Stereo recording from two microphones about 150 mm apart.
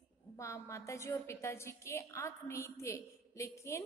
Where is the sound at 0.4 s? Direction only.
20° left (ahead or behind).